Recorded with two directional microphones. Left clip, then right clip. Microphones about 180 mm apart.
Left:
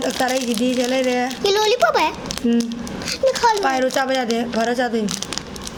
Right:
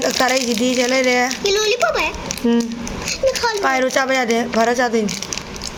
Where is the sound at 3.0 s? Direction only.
50° left (ahead or behind).